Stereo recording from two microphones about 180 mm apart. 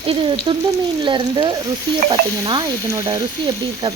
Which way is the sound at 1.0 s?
25° right (ahead or behind).